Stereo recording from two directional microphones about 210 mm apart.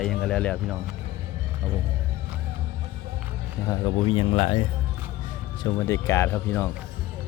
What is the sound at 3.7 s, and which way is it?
Speech, 25° left (ahead or behind).